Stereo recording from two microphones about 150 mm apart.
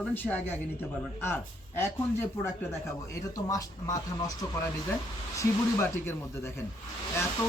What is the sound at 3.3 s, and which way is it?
Speech, 25° left (ahead or behind).